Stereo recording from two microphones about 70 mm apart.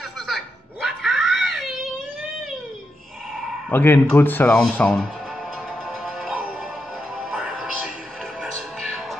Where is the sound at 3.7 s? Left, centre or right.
Left.